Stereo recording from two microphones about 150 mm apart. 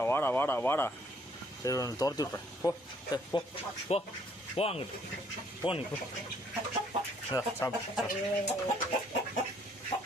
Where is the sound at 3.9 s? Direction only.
45° left (ahead or behind).